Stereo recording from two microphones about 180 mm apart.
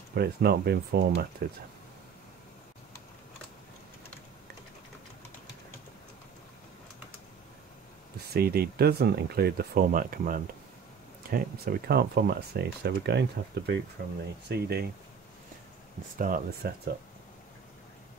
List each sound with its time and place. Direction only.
0.1 s speech: 60° right (ahead or behind)
8.3 s speech: 60° right (ahead or behind)
16.2 s speech: 50° right (ahead or behind)